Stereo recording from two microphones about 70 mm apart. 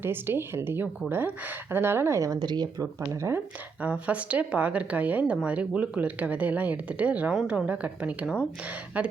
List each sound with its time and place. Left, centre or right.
0.0 s speech: right
2.4 s speech: right
3.0 s speech: right
3.8 s speech: centre